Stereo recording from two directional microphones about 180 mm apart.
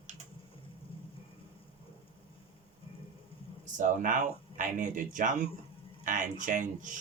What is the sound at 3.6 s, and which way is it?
Speech, 45° right (ahead or behind).